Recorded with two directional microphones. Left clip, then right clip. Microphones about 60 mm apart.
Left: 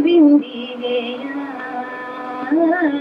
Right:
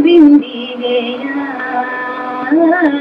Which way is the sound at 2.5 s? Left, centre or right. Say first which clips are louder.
Right 5 dB; right.